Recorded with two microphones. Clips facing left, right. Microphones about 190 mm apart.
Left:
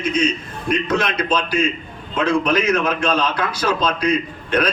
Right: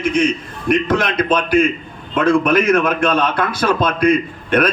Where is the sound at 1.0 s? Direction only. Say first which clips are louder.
Right 3 dB; 60° right (ahead or behind).